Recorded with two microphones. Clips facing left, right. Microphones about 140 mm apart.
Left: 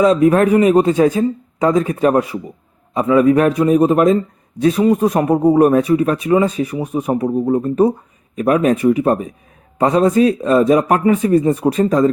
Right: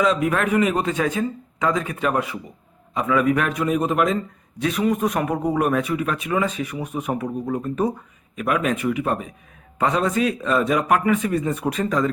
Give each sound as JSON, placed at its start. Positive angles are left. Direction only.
{"t": 0.0, "sound": "speech", "side_deg": 35}